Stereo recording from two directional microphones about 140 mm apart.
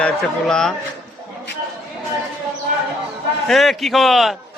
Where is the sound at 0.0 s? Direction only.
5° left (ahead or behind).